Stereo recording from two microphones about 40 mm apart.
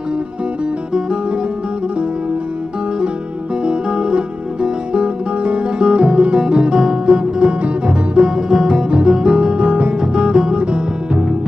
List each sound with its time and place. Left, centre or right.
3.6 s music: right
6.4 s music: centre